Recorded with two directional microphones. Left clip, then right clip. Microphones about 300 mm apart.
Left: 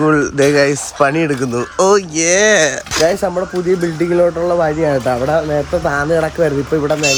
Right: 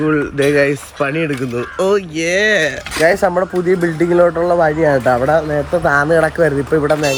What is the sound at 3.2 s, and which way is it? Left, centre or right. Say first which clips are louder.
Speech: right 2 dB; centre.